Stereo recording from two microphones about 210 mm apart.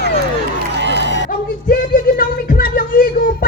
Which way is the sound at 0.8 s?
55° right (ahead or behind).